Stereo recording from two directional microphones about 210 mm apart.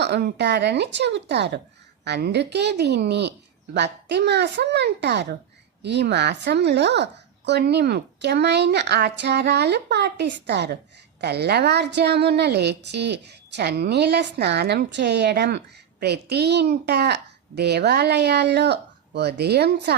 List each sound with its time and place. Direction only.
0.0 s a woman's voice: 50° right (ahead or behind)